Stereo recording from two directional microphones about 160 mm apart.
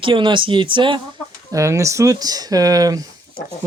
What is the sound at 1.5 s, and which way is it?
Speech, 20° right (ahead or behind).